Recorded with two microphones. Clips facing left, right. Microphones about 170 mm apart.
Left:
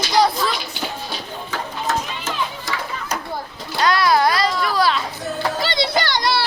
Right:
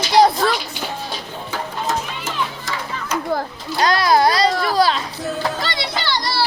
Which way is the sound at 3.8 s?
35° right (ahead or behind).